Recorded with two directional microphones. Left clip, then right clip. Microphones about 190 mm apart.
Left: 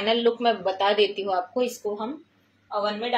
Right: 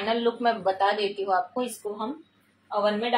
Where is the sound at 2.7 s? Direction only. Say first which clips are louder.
Right 1 dB; 10° left (ahead or behind).